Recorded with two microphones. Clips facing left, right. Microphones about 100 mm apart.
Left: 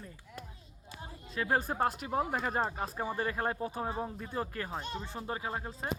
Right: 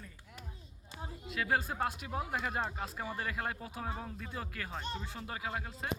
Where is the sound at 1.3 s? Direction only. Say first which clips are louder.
Left 2 dB; 35° left (ahead or behind).